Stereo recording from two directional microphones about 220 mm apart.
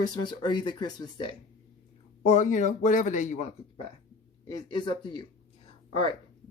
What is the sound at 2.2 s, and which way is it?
Speech, 35° left (ahead or behind).